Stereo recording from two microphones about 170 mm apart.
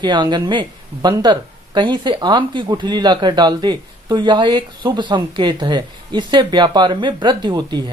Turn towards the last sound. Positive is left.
turn(degrees=-25)  # may be behind; listen again after turning